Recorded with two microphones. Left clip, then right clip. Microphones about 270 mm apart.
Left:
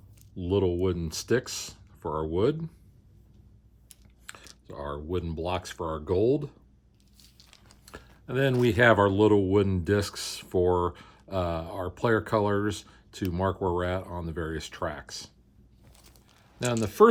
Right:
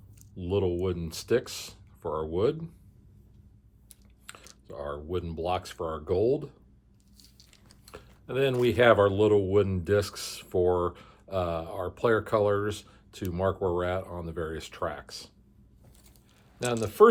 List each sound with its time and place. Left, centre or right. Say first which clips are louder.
0.3 s speech: left 2 dB; left
4.3 s typing: left 2 dB; left
4.6 s speech: even; left
7.9 s speech: even; left
16.7 s speech: even; left